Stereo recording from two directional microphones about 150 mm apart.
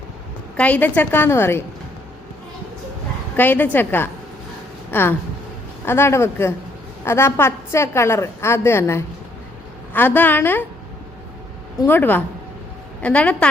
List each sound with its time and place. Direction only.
0.5 s a woman's voice: 10° left (ahead or behind)
3.3 s a woman's voice: 10° left (ahead or behind)
11.8 s a woman's voice: 15° left (ahead or behind)